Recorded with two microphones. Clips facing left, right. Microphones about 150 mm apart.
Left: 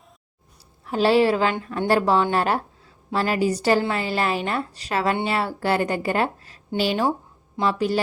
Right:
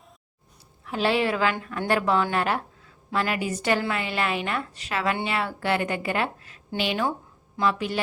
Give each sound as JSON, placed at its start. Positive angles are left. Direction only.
{"t": 0.9, "sound": "a woman's voice", "side_deg": 35}